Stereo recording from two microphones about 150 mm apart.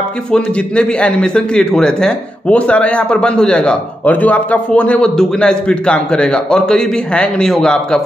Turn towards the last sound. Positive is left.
turn(degrees=5)  # may be behind; listen again after turning